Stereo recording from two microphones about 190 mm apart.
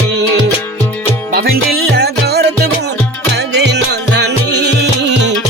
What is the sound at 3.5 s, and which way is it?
Music, 60° right (ahead or behind).